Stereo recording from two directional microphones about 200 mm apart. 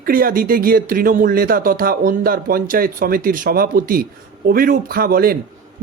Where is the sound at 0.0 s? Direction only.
45° right (ahead or behind).